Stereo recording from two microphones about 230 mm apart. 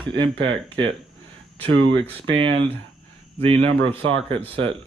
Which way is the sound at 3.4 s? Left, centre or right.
Right.